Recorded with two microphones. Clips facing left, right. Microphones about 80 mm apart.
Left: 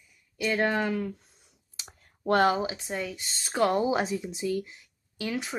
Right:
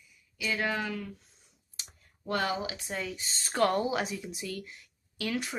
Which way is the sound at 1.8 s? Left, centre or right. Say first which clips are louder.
Left 9 dB; left.